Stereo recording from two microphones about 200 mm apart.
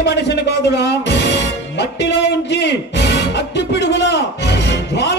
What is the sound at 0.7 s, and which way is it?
Music, 60° left (ahead or behind).